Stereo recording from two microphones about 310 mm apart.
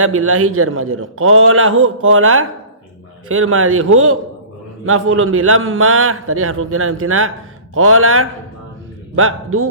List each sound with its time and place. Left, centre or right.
0.0 s a man's voice: right